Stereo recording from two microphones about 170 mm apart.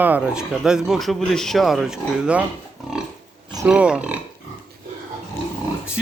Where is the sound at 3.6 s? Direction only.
5° right (ahead or behind).